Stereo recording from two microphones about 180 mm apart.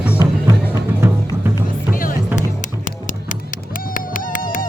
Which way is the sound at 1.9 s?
50° left (ahead or behind).